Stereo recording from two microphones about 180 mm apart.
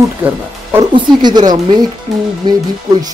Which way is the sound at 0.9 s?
25° right (ahead or behind).